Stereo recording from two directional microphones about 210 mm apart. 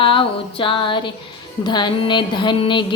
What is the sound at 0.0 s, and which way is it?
Music, 25° left (ahead or behind).